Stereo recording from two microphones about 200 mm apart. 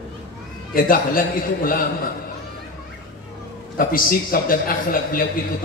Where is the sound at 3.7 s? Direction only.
45° left (ahead or behind).